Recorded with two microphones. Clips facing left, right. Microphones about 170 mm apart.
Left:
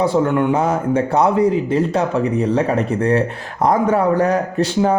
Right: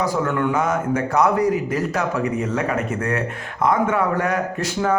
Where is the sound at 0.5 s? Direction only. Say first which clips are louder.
Left 4 dB; 30° left (ahead or behind).